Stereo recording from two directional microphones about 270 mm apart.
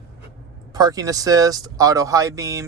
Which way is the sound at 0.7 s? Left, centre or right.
Centre.